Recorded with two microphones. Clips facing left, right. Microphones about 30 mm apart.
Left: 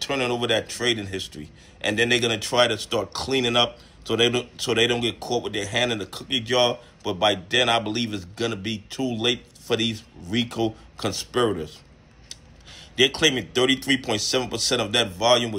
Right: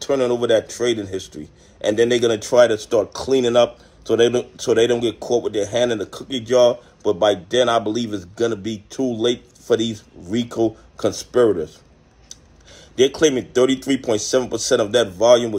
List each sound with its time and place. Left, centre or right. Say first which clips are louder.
0.0 s speech: right 6 dB; left
12.7 s speech: right 4 dB; left